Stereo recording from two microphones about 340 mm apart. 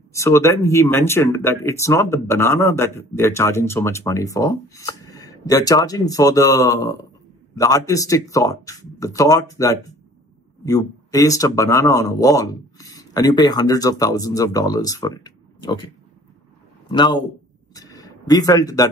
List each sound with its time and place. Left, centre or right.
0.1 s speech: centre
16.9 s speech: centre
17.7 s a sound: centre